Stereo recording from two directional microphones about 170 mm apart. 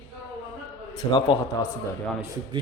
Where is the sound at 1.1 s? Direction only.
30° left (ahead or behind).